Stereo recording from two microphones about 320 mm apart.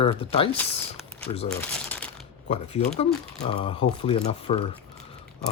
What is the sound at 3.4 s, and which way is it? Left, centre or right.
Speech, centre.